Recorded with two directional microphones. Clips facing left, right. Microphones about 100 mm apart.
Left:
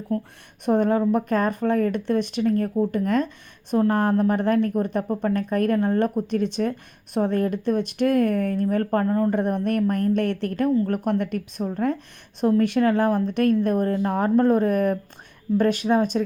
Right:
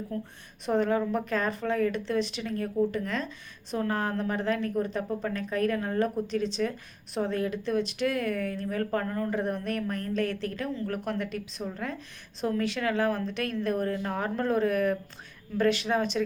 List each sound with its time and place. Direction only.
0.6 s speech: 50° left (ahead or behind)
9.3 s speech: 55° left (ahead or behind)
10.8 s speech: 45° left (ahead or behind)